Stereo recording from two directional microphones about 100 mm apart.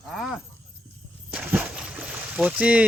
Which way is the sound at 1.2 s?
10° right (ahead or behind).